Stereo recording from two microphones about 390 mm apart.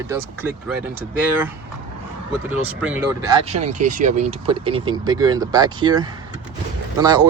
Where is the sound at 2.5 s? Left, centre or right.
Centre.